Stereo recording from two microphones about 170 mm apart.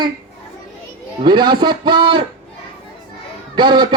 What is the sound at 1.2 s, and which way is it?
A man's voice, 25° right (ahead or behind).